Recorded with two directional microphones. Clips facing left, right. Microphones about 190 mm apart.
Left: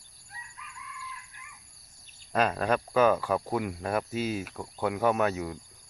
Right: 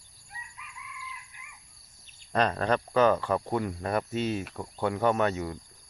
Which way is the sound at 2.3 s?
5° left (ahead or behind).